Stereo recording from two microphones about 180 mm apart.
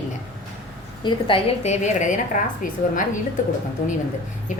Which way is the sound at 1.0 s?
30° left (ahead or behind).